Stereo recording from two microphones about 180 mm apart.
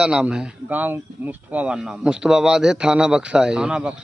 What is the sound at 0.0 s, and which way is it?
Speech, 5° right (ahead or behind).